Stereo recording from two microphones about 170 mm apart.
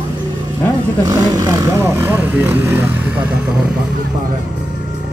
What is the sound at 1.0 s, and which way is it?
Speech, 20° right (ahead or behind).